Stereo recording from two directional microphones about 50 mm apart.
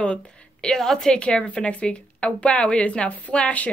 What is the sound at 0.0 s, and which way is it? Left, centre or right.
Speech, left.